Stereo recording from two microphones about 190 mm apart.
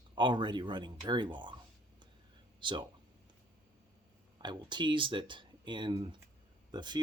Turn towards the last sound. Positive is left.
turn(degrees=-20)  # may be behind; listen again after turning